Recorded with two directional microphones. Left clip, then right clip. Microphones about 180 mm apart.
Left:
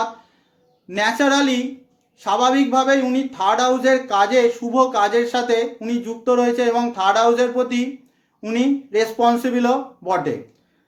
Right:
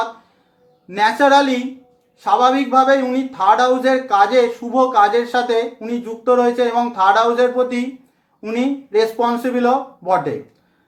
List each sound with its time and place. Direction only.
0.9 s a man's voice: 20° left (ahead or behind)